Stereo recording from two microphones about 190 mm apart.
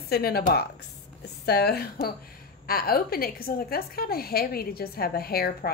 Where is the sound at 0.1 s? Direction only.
55° left (ahead or behind).